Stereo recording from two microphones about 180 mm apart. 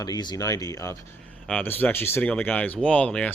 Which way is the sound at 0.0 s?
20° left (ahead or behind).